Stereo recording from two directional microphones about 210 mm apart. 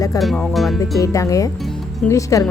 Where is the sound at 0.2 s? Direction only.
Centre (ahead or behind).